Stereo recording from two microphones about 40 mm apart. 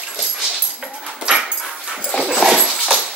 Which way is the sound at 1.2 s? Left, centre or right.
Centre.